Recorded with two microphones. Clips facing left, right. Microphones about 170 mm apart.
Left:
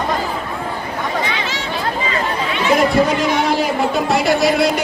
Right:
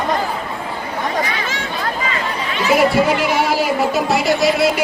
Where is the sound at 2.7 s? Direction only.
5° right (ahead or behind).